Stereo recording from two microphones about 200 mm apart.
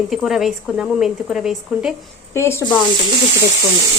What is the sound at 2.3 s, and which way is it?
Speech, 15° left (ahead or behind).